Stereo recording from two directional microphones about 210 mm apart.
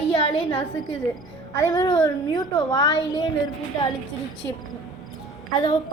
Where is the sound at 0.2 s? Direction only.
30° left (ahead or behind).